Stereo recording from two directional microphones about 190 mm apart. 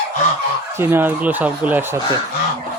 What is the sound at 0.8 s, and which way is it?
Speech, 10° right (ahead or behind).